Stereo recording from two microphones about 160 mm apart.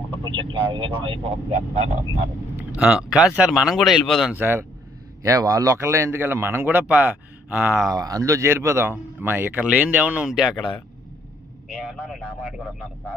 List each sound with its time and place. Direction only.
0.2 s a sound: 30° right (ahead or behind)
0.7 s speech: 30° right (ahead or behind)
1.3 s speech: 45° right (ahead or behind)
2.5 s speech: 10° right (ahead or behind)
4.4 s a man's voice: 15° right (ahead or behind)
7.9 s a man's voice: 20° right (ahead or behind); by 12.6 s 5° right (ahead or behind)